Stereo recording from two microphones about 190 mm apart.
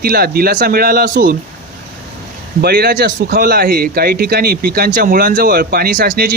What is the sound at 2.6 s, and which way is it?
Speech, 60° right (ahead or behind).